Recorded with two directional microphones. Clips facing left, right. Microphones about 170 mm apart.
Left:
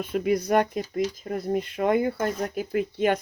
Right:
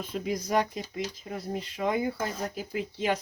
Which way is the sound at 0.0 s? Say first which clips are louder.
Left 7 dB; 60° left (ahead or behind).